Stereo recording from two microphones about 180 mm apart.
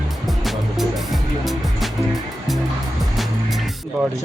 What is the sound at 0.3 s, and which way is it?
Music, centre (ahead or behind).